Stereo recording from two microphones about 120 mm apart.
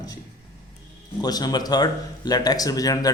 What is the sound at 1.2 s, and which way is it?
Speech, 35° left (ahead or behind).